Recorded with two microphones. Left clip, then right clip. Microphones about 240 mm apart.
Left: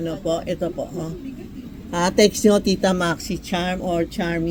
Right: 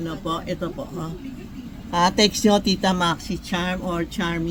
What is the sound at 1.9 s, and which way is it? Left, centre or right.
Speech, centre.